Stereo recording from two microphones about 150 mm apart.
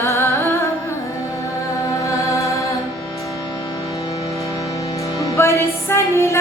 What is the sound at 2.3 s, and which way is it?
Music, 20° left (ahead or behind).